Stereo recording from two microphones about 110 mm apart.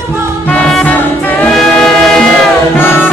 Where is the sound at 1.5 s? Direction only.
5° left (ahead or behind).